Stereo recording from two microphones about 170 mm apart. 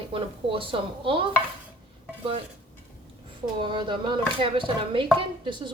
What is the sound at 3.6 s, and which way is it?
Speech, 30° right (ahead or behind).